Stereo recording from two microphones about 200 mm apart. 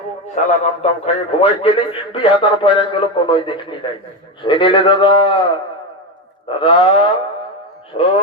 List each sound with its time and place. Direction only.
0.3 s a man's voice: 30° left (ahead or behind)
7.9 s a man's voice: 25° left (ahead or behind)